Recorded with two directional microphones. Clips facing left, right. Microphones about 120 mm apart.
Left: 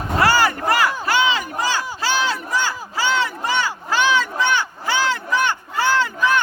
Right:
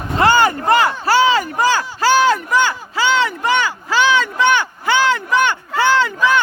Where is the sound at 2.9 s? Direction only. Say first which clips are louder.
Right 2 dB; 75° right (ahead or behind).